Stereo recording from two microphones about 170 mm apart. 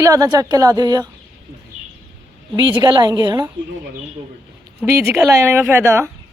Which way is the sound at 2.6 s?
25° right (ahead or behind).